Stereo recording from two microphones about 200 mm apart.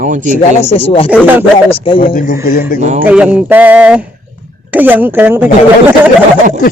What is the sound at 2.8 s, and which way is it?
Speech, 35° right (ahead or behind).